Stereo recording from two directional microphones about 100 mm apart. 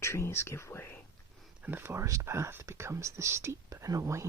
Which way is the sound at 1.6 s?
20° right (ahead or behind).